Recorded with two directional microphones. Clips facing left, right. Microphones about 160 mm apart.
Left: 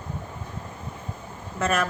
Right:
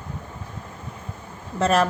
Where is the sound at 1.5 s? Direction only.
35° right (ahead or behind).